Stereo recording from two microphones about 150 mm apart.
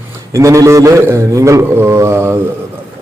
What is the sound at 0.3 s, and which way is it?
A man's voice, 20° right (ahead or behind).